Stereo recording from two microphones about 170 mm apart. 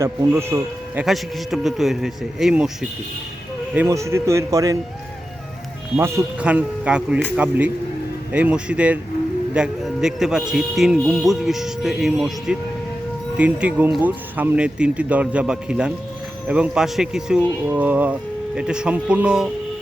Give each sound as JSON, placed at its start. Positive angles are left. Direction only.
{"t": 0.0, "sound": "speech", "side_deg": -15}
{"t": 1.0, "sound": "speech", "side_deg": 0}
{"t": 3.8, "sound": "speech", "side_deg": -15}
{"t": 6.0, "sound": "speech", "side_deg": -10}